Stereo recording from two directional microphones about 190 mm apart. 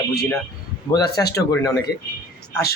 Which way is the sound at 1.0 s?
60° left (ahead or behind).